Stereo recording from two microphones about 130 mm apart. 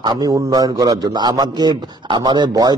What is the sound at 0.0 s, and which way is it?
Speech, 30° right (ahead or behind).